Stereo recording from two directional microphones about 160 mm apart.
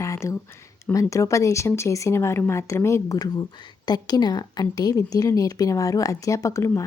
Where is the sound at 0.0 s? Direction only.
20° left (ahead or behind).